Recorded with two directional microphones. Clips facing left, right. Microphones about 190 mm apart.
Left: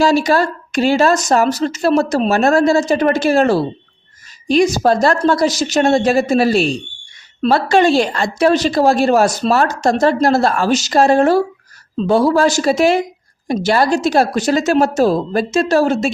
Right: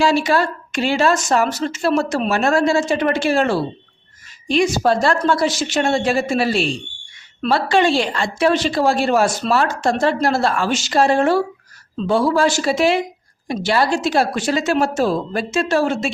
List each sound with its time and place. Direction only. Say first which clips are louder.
0.0 s a woman's voice: left 3 dB; 40° left (ahead or behind)